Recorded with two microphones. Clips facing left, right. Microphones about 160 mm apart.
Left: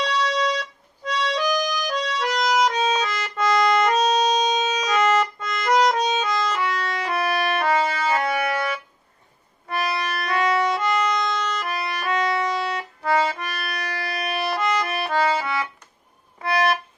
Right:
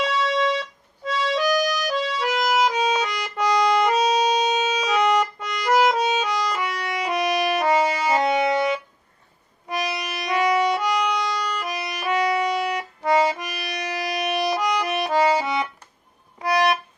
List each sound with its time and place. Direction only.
0.0 s music: centre (ahead or behind); by 16.7 s 15° right (ahead or behind)